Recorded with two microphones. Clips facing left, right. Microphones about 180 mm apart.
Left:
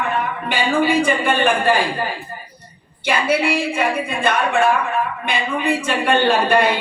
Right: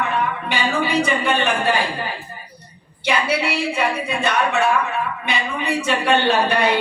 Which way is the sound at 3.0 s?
50° left (ahead or behind).